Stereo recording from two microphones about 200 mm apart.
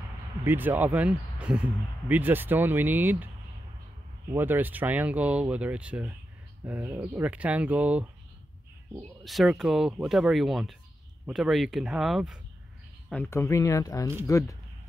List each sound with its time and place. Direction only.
0.4 s speech: 10° right (ahead or behind)
4.3 s speech: 10° right (ahead or behind)
9.2 s speech: centre (ahead or behind)
13.1 s speech: 10° left (ahead or behind)